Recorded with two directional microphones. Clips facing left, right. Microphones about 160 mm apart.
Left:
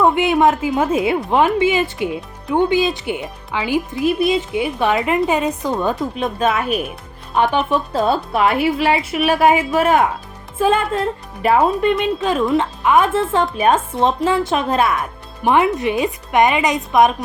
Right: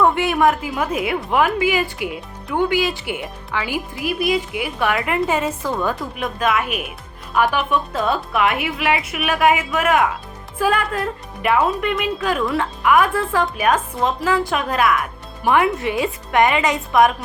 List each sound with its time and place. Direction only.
0.0 s a woman's voice: 20° left (ahead or behind)